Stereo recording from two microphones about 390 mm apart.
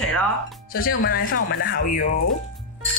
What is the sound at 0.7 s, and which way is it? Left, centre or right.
Speech, left.